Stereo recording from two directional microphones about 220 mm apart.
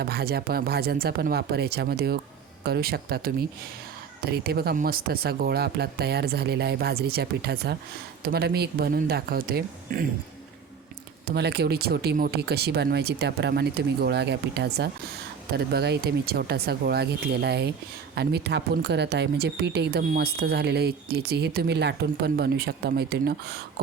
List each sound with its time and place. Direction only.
0.0 s speech: 45° right (ahead or behind)
11.3 s speech: 50° right (ahead or behind)